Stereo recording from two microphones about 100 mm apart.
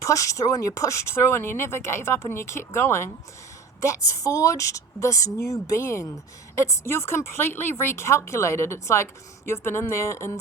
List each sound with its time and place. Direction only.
0.0 s a woman's voice: 30° left (ahead or behind)